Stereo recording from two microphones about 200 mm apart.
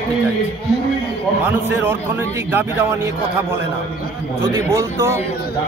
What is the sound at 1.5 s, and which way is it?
A man's voice, 10° right (ahead or behind).